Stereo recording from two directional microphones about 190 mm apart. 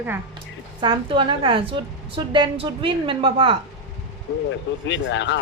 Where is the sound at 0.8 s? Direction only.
25° right (ahead or behind).